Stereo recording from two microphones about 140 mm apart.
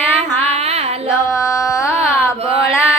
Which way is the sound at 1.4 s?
25° left (ahead or behind).